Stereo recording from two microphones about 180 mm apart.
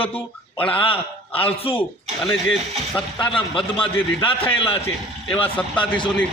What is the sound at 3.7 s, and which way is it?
A man's voice, 30° left (ahead or behind).